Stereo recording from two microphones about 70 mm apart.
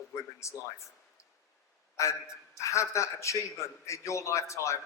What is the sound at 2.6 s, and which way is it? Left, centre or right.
A man's voice, left.